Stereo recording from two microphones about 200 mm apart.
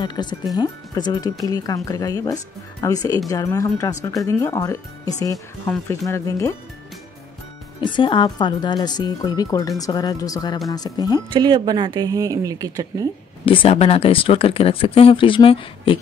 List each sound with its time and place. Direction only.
0.0 s speech: 20° left (ahead or behind)
7.8 s speech: 25° left (ahead or behind)
11.3 s speech: 20° right (ahead or behind)
13.5 s speech: 30° left (ahead or behind)